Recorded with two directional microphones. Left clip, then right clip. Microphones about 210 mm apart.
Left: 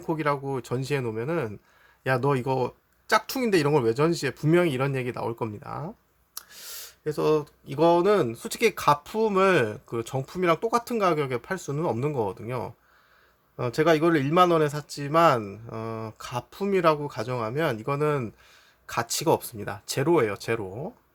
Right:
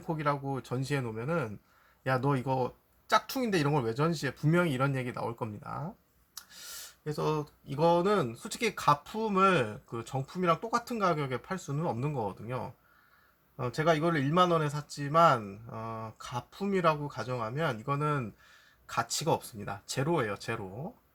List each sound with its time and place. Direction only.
0.0 s speech: 40° left (ahead or behind)